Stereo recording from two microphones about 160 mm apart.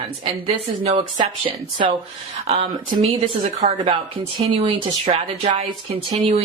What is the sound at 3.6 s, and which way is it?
Speech, 45° right (ahead or behind).